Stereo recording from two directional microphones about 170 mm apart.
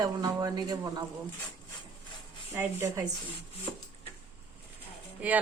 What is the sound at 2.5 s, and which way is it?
Speech, 15° right (ahead or behind).